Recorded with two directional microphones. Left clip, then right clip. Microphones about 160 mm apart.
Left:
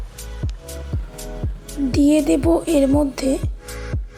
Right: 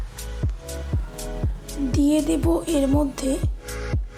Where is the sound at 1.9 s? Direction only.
30° left (ahead or behind).